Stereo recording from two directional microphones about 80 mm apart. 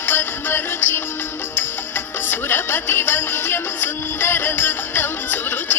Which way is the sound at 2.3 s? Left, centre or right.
Left.